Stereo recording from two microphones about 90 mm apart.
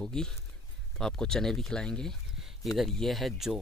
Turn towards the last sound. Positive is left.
turn(degrees=0)  # may be behind; listen again after turning